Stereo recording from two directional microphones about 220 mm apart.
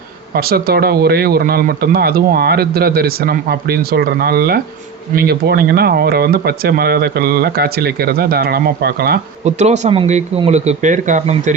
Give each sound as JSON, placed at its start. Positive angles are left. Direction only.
{"t": 0.3, "sound": "speech", "side_deg": -45}
{"t": 9.4, "sound": "speech", "side_deg": -30}